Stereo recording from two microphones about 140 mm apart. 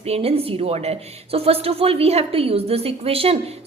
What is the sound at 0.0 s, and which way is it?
A woman's voice, 45° right (ahead or behind).